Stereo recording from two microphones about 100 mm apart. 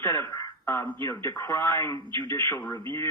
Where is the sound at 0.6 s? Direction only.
20° left (ahead or behind).